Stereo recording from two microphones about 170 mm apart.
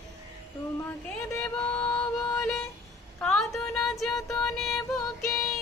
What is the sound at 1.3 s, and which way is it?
Music, 10° left (ahead or behind).